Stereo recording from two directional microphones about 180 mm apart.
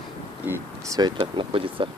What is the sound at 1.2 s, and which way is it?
Speech, 30° right (ahead or behind).